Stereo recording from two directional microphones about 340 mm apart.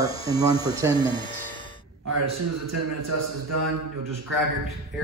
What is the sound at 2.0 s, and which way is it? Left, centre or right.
A man's voice, right.